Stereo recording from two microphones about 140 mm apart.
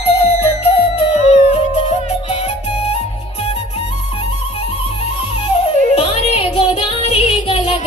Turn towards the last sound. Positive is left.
turn(degrees=45)  # may be behind; listen again after turning